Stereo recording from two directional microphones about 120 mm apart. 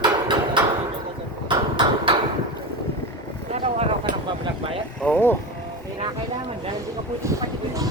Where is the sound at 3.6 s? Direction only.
50° right (ahead or behind).